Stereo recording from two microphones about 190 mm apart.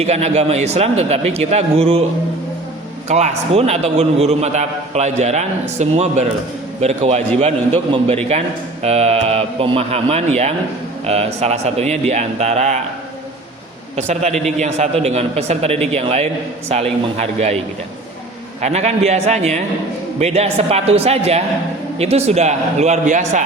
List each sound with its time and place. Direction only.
0.0 s a man's voice: 35° right (ahead or behind)
3.1 s a man's voice: 35° right (ahead or behind)
8.8 s a man's voice: 35° right (ahead or behind)
13.9 s a man's voice: 35° right (ahead or behind)
18.6 s a man's voice: 35° right (ahead or behind)